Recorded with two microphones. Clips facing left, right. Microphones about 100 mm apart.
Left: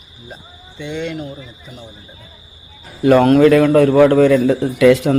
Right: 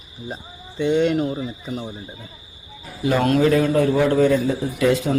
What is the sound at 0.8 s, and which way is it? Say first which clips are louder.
Speech: right 6 dB; 45° right (ahead or behind).